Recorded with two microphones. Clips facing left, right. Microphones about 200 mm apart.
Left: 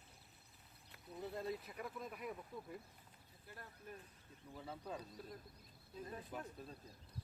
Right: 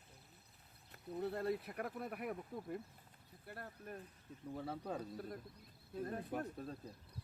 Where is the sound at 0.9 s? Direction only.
60° right (ahead or behind).